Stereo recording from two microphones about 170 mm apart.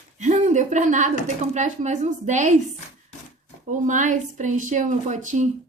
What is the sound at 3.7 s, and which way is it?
A woman's voice, 45° right (ahead or behind).